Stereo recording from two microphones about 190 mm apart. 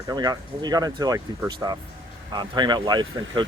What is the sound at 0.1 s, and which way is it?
Speech, 20° right (ahead or behind).